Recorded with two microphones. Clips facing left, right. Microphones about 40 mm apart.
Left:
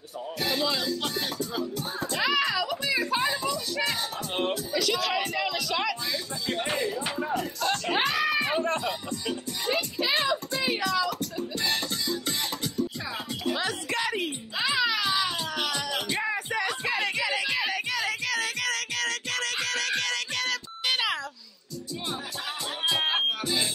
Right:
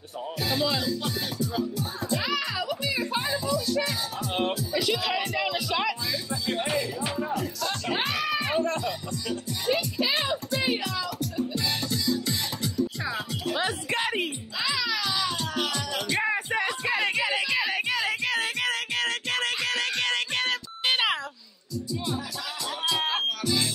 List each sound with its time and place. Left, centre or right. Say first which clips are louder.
0.5 s music: right 1 dB; centre
2.0 s music: left 3 dB; left
4.7 s speech: even; centre
5.2 s music: right 1 dB; centre
6.7 s music: even; left
8.6 s music: even; left
10.0 s music: left 1 dB; left
13.6 s music: right 1 dB; right
14.6 s music: left 2 dB; left
16.2 s music: right 5 dB; right
22.8 s music: left 1 dB; left